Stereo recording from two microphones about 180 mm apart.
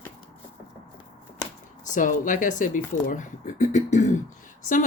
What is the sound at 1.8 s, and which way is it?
Speech, 45° left (ahead or behind).